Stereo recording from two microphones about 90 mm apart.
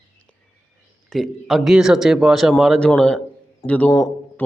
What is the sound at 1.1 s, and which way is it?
Speech, centre (ahead or behind).